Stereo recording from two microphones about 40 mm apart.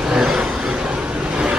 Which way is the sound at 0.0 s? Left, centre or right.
Centre.